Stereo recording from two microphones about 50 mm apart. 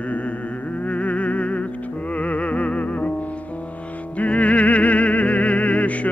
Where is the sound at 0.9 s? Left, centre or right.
Left.